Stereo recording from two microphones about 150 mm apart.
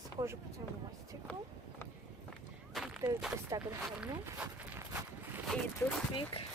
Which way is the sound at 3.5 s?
25° right (ahead or behind).